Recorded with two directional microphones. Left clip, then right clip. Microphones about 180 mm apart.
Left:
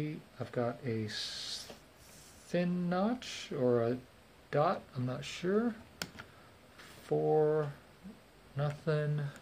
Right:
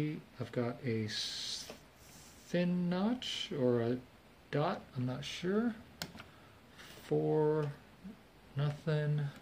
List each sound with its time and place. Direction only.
0.0 s speech: centre (ahead or behind)
7.3 s speech: 5° right (ahead or behind)